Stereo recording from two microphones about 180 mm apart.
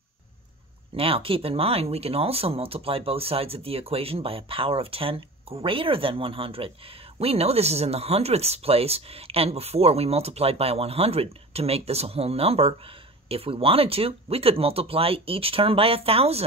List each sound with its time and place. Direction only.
0.9 s speech: 30° right (ahead or behind)